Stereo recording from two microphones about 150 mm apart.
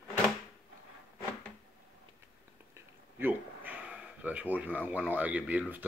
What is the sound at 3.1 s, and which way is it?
Speech, 10° right (ahead or behind).